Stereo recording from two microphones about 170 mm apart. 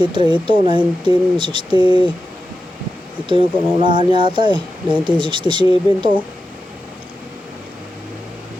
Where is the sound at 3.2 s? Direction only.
30° right (ahead or behind).